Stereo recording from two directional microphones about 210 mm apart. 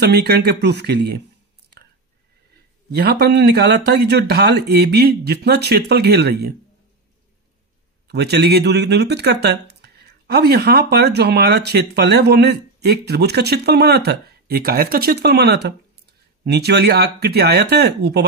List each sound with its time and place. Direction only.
0.0 s speech: 50° right (ahead or behind)
3.0 s speech: 50° right (ahead or behind)
8.1 s speech: 50° right (ahead or behind)